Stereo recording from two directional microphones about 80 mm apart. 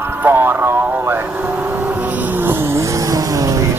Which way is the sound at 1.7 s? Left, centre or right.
Right.